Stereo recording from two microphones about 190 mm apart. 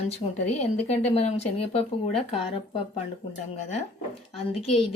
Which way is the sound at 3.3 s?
35° left (ahead or behind).